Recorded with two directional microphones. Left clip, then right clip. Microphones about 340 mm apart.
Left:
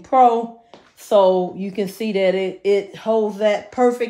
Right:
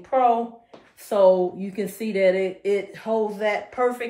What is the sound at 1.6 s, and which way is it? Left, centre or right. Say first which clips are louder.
Speech: left 5 dB; left.